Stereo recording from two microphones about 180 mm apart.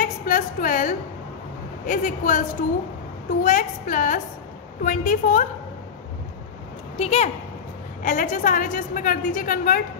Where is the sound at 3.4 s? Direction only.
45° left (ahead or behind).